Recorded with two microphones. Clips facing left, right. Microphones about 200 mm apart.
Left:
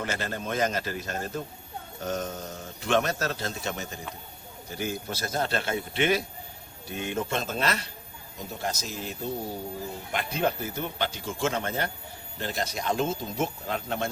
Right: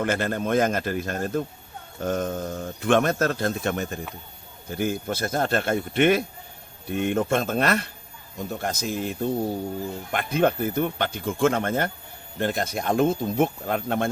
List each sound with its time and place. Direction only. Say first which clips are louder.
0.0 s speech: right 7 dB; 55° right (ahead or behind)